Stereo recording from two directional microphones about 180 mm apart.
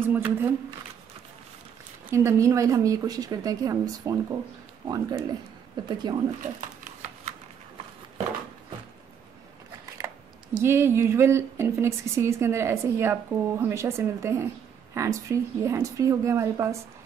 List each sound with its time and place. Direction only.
0.0 s speech: 10° right (ahead or behind)
2.0 s a woman's voice: 15° right (ahead or behind)
6.8 s a sound: 40° right (ahead or behind)
9.9 s speech: 15° right (ahead or behind)